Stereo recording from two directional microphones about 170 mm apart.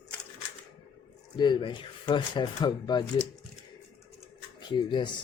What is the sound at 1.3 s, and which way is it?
Speech, 25° left (ahead or behind).